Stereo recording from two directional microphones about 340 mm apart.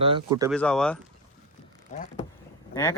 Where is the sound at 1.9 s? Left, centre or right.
Left.